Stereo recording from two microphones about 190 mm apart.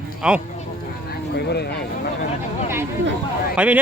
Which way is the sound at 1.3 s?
60° left (ahead or behind).